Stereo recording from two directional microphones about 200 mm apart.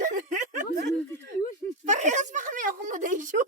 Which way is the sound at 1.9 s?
35° right (ahead or behind).